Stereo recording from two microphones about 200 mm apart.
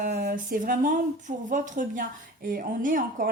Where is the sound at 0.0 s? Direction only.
50° right (ahead or behind).